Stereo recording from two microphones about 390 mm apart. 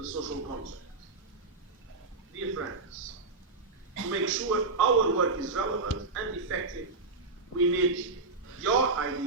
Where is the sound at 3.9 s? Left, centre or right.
Right.